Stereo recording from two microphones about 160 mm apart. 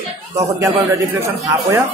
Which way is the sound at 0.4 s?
20° right (ahead or behind).